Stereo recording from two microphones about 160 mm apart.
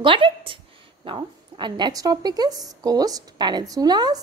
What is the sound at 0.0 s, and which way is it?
A woman's voice, 30° right (ahead or behind).